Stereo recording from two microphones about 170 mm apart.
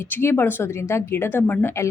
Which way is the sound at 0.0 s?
15° left (ahead or behind).